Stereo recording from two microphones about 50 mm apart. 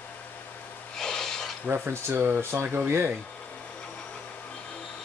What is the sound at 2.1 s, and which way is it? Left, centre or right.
Speech, right.